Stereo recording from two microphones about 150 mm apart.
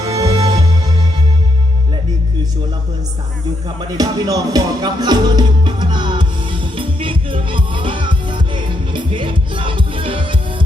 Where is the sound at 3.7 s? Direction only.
25° right (ahead or behind).